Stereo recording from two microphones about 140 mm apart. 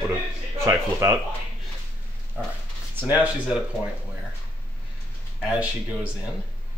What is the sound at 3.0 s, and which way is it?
Speech, 10° right (ahead or behind).